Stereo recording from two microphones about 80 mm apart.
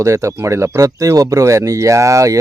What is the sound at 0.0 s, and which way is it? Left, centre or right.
Speech, right.